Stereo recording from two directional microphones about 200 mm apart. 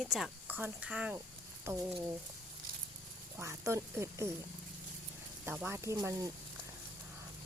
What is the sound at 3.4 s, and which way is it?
Speech, 15° right (ahead or behind).